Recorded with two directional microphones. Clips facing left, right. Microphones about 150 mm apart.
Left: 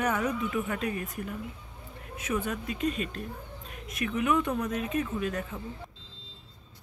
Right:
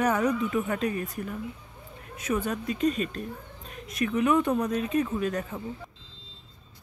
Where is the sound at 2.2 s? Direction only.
35° right (ahead or behind).